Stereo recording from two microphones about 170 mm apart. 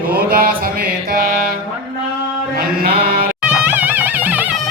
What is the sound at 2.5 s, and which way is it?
Sheep, 60° right (ahead or behind).